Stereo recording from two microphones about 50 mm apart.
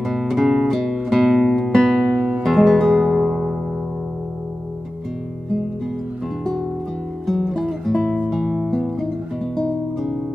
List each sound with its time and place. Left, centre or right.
0.0 s music: centre
1.5 s music: centre
2.1 s music: right
2.4 s music: centre
2.9 s music: centre
7.2 s music: centre
8.3 s music: centre
8.6 s music: centre